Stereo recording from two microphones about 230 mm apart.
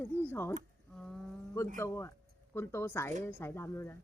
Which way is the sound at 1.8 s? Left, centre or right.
Centre.